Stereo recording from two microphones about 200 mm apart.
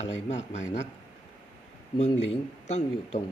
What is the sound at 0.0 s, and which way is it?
Speech, 35° left (ahead or behind).